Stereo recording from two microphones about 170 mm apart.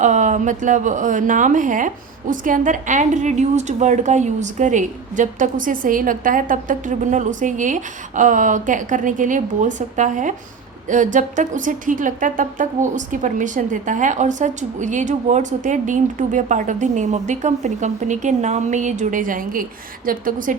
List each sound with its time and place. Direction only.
0.0 s a woman's voice: 45° right (ahead or behind)